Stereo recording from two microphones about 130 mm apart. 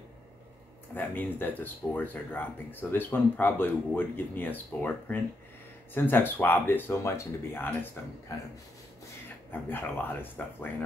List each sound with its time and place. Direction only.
0.9 s speech: 15° left (ahead or behind)
9.5 s speech: 15° left (ahead or behind)